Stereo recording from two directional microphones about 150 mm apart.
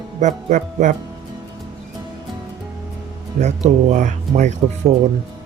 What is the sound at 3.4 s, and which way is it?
Speech, 55° right (ahead or behind).